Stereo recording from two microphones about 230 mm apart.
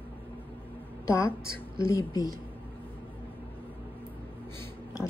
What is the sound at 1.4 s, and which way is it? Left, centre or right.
Speech, right.